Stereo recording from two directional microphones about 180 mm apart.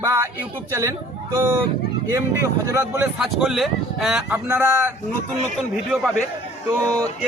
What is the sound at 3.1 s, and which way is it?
Speech, centre (ahead or behind).